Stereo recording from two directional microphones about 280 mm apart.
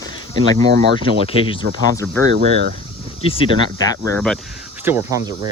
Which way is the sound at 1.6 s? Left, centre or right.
Right.